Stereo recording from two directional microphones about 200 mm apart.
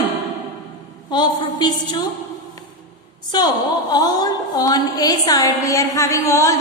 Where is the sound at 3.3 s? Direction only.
20° left (ahead or behind).